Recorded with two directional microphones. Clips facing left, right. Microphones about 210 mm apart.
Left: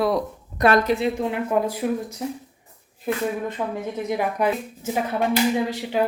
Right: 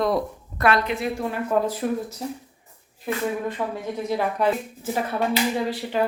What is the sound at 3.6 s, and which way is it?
Speech, 15° left (ahead or behind).